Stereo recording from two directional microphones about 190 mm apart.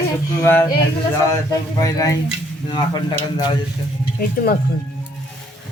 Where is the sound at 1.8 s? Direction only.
15° left (ahead or behind).